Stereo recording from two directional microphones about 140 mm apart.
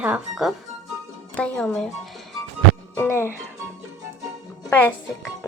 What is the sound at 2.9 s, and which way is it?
Speech, 15° left (ahead or behind).